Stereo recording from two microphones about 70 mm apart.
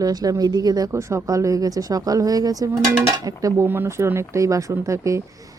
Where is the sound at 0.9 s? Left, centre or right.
Right.